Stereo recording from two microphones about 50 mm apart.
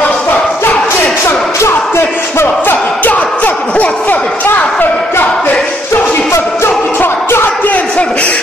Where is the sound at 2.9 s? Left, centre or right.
Left.